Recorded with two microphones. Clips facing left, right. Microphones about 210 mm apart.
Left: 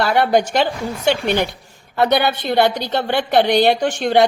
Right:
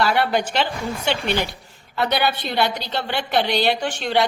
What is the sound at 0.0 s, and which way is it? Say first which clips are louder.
A woman's voice: left 4 dB; 50° left (ahead or behind).